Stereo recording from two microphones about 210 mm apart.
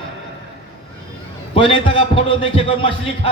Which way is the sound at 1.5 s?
25° left (ahead or behind).